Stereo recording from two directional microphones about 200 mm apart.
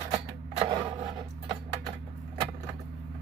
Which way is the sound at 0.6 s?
20° right (ahead or behind).